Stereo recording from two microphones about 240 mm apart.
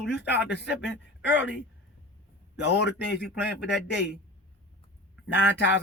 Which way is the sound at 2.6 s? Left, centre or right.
Left.